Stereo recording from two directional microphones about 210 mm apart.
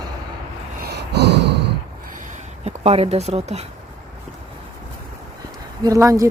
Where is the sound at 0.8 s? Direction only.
50° right (ahead or behind).